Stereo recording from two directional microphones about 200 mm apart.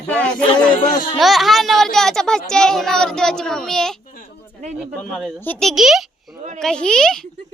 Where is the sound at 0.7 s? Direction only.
45° left (ahead or behind).